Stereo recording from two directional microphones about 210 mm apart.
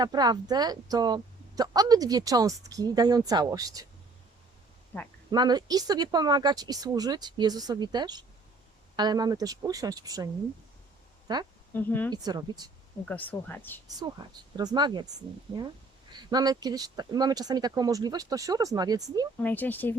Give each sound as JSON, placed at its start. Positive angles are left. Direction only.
{"t": 0.0, "sound": "a woman's voice", "side_deg": -20}
{"t": 5.3, "sound": "a woman's voice", "side_deg": -20}
{"t": 11.3, "sound": "speech", "side_deg": -20}
{"t": 11.7, "sound": "speech", "side_deg": 10}
{"t": 12.1, "sound": "speech", "side_deg": -20}
{"t": 13.1, "sound": "speech", "side_deg": 10}
{"t": 14.5, "sound": "speech", "side_deg": -20}
{"t": 19.4, "sound": "speech", "side_deg": 10}